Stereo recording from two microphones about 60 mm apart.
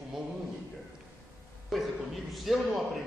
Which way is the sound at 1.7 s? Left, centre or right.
Centre.